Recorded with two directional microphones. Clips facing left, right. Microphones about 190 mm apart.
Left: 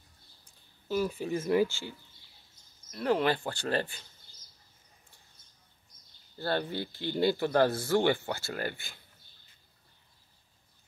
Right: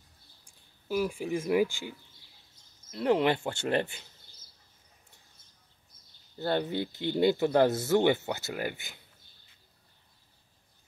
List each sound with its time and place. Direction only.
0.5 s speech: 10° right (ahead or behind)
6.3 s speech: 20° right (ahead or behind)